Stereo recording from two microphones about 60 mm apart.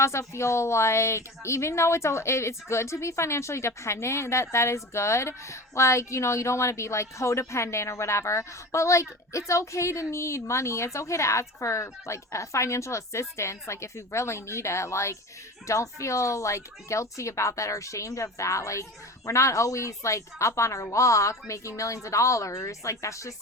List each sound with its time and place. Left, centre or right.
0.0 s a woman's voice: left